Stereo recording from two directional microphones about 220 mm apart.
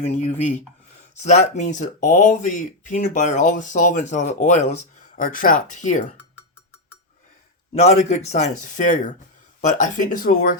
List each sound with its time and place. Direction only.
0.0 s speech: 30° left (ahead or behind)
7.8 s speech: 30° left (ahead or behind)